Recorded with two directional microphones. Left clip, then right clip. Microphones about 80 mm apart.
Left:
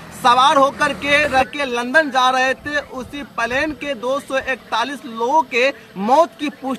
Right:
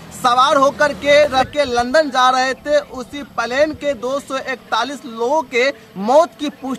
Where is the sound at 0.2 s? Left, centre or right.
Right.